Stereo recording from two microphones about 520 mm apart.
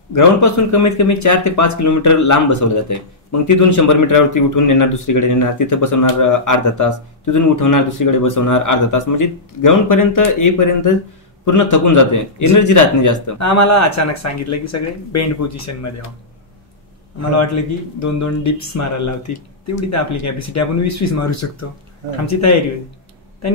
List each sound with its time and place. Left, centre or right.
0.1 s speech: left
17.9 s speech: left